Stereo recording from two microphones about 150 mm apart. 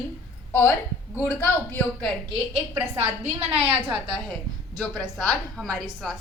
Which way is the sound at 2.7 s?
45° right (ahead or behind).